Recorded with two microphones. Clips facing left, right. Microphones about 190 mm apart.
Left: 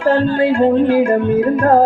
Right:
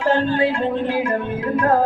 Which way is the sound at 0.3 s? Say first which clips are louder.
Left 7 dB; 50° left (ahead or behind).